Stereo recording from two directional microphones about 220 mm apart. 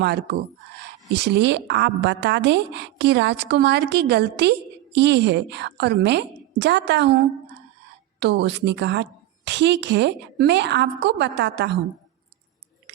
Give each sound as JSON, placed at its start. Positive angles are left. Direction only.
{"t": 0.0, "sound": "a woman's voice", "side_deg": -45}